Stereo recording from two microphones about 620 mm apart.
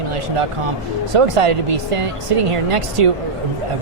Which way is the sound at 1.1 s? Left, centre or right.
Right.